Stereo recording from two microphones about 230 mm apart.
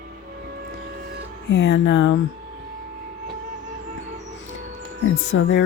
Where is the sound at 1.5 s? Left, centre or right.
Left.